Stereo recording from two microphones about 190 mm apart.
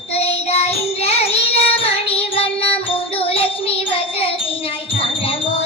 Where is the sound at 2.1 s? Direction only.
30° left (ahead or behind).